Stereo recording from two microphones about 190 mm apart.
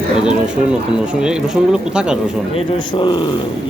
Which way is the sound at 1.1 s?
5° right (ahead or behind).